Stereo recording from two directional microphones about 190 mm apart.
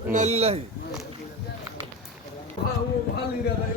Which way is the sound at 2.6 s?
30° left (ahead or behind).